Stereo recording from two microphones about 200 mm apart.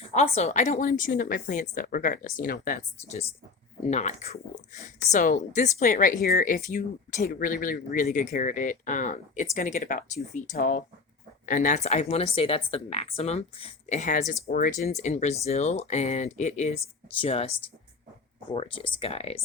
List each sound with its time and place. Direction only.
0.1 s a woman's voice: 35° left (ahead or behind)